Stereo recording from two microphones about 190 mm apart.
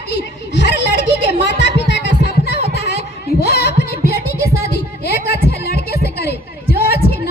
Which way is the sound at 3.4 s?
60° left (ahead or behind).